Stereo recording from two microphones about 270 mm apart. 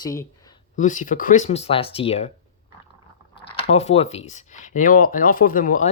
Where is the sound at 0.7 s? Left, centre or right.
Left.